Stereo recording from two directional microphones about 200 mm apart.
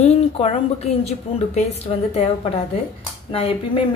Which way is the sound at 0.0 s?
30° left (ahead or behind).